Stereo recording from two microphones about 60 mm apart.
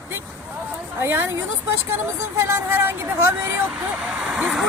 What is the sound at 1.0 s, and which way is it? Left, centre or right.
Speech, right.